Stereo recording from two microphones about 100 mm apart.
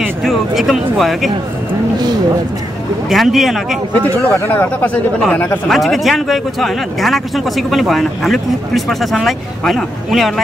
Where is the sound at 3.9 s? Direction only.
20° left (ahead or behind).